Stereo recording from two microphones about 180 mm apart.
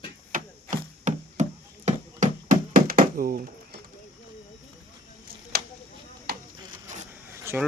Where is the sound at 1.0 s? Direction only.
40° right (ahead or behind).